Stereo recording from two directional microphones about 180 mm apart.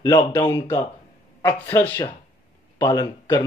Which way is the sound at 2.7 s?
25° left (ahead or behind).